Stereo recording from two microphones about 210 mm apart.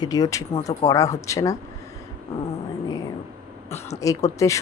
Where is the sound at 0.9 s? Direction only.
15° left (ahead or behind).